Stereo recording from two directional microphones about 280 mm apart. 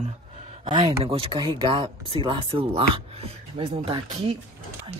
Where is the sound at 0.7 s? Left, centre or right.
Centre.